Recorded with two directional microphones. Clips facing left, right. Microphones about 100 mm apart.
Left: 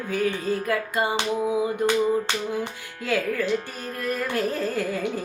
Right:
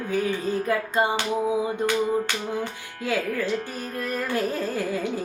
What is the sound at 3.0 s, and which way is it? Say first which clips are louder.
Carnatic music: left 1 dB; 15° right (ahead or behind).